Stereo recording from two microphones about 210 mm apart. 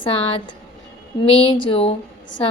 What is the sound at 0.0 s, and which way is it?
Speech, 25° left (ahead or behind).